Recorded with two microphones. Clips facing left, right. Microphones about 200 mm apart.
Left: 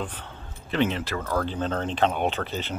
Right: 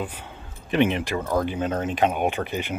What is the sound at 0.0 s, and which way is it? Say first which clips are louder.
Speech: right 2 dB; 10° right (ahead or behind).